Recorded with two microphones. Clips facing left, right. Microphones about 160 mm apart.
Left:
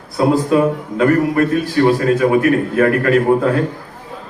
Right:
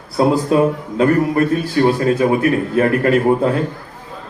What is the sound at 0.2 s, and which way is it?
A man's voice, 35° right (ahead or behind).